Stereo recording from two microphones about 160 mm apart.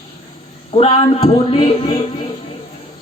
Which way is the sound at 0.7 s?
35° left (ahead or behind).